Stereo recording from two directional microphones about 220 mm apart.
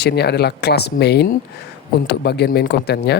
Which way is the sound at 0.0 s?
50° left (ahead or behind).